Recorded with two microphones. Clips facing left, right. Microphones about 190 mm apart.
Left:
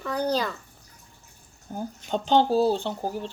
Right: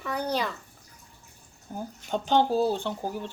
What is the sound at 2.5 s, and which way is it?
Speech, 35° left (ahead or behind).